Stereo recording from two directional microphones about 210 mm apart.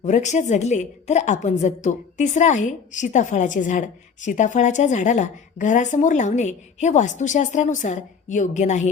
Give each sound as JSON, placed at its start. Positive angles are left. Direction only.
{"t": 0.0, "sound": "a woman's voice", "side_deg": 35}